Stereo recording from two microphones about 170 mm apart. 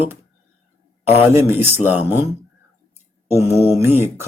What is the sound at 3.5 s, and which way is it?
Speech, 15° right (ahead or behind).